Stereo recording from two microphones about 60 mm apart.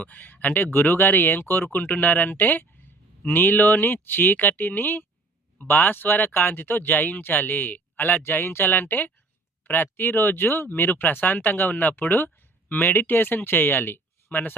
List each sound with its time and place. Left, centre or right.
0.0 s speech: left